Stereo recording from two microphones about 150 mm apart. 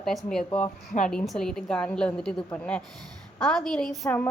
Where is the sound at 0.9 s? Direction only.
60° left (ahead or behind).